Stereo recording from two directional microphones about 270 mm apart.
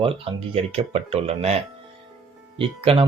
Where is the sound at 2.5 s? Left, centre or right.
Centre.